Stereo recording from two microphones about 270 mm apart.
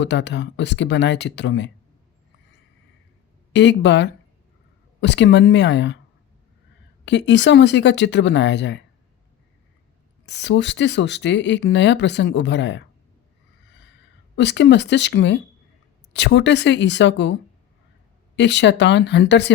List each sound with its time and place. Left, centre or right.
0.0 s speech: left
3.5 s speech: left
7.0 s speech: left
10.2 s speech: left
13.7 s a sound: left
14.3 s speech: left
18.3 s speech: left